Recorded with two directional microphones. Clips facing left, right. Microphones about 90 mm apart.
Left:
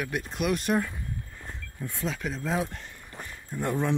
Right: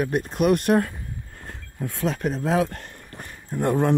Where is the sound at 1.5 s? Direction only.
75° right (ahead or behind).